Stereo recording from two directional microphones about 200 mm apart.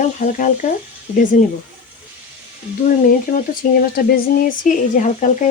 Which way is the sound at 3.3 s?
45° left (ahead or behind).